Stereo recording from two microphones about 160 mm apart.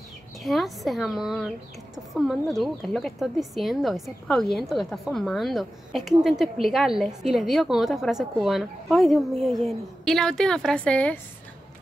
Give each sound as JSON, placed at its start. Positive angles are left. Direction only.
{"t": 0.4, "sound": "speech", "side_deg": 0}